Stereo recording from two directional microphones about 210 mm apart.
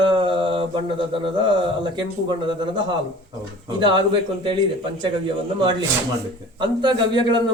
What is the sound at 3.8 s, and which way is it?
Speech, 20° right (ahead or behind).